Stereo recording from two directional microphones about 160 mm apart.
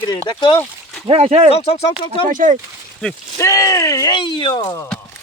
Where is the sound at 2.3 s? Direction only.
55° right (ahead or behind).